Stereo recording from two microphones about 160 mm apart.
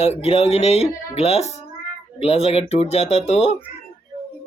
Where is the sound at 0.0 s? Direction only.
40° left (ahead or behind).